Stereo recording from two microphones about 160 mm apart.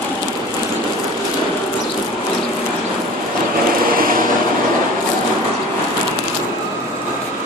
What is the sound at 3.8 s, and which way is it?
Vehicle, 60° right (ahead or behind).